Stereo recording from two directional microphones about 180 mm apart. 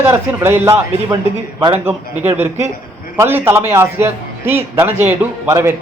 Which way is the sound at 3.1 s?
15° right (ahead or behind).